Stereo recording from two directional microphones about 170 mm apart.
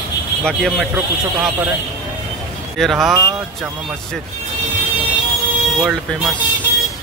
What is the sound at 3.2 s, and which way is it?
Speech, 20° right (ahead or behind).